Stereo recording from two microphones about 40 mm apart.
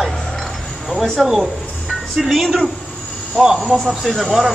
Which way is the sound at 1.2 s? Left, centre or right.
Centre.